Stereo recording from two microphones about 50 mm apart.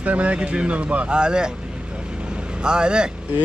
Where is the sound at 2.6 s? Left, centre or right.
Centre.